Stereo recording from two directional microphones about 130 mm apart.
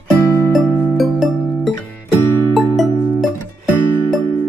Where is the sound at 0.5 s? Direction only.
Centre (ahead or behind).